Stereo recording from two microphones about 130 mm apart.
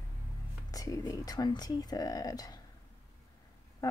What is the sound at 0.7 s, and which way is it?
A woman's voice, 25° left (ahead or behind).